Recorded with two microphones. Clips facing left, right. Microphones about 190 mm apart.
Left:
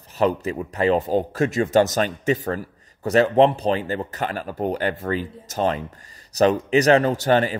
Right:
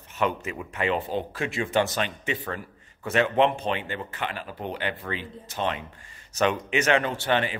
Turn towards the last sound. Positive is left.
turn(degrees=40)  # may be behind; listen again after turning